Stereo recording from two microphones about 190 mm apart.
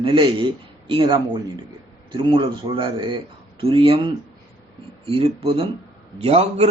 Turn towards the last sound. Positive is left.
turn(degrees=-35)  # may be behind; listen again after turning